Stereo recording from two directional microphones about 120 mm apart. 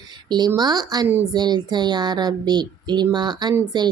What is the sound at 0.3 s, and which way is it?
Speech, 35° right (ahead or behind).